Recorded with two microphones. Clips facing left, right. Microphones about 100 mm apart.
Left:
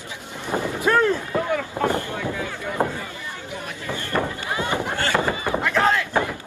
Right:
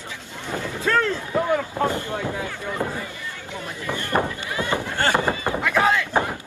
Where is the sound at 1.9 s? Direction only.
20° right (ahead or behind).